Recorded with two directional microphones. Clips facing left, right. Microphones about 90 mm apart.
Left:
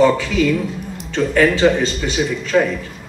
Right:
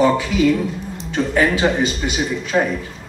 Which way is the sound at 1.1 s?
15° right (ahead or behind).